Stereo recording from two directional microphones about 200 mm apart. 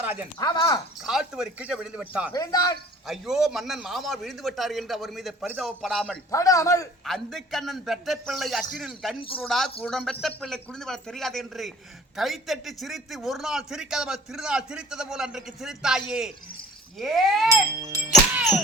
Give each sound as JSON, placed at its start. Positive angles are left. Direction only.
{"t": 0.0, "sound": "a sound", "side_deg": -10}
{"t": 0.3, "sound": "a man's voice", "side_deg": 20}
{"t": 1.0, "sound": "a man's voice", "side_deg": -5}
{"t": 2.3, "sound": "a man's voice", "side_deg": 20}
{"t": 3.1, "sound": "a man's voice", "side_deg": 0}
{"t": 6.3, "sound": "speech", "side_deg": 15}
{"t": 7.0, "sound": "a man's voice", "side_deg": 0}
{"t": 17.5, "sound": "speech", "side_deg": -15}
{"t": 18.1, "sound": "music", "side_deg": -5}